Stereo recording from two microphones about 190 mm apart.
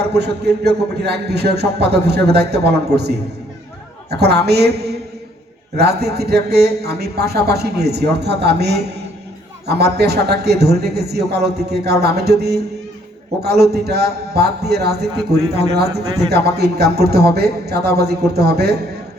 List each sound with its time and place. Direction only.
0.1 s a man's voice: 60° right (ahead or behind)